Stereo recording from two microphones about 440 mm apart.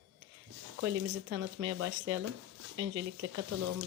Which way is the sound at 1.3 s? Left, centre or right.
Right.